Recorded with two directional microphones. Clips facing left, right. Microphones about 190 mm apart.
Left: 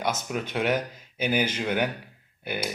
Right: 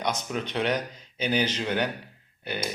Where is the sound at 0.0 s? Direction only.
5° left (ahead or behind).